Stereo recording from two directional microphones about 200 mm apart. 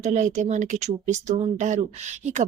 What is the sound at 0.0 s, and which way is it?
Speech, 35° right (ahead or behind).